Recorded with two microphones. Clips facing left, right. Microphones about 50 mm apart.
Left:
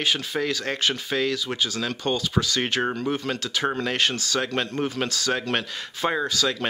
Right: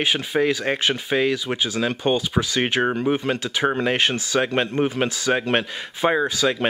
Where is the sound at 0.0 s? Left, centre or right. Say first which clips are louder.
Right 5 dB; centre.